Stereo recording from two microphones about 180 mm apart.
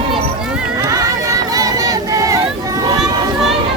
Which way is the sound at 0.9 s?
20° right (ahead or behind).